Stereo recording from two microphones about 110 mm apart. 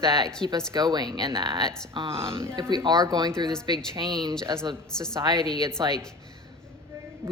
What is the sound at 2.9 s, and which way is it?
Speech, 35° right (ahead or behind).